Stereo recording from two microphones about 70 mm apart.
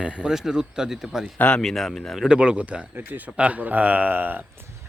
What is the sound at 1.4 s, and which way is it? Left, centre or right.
Speech, centre.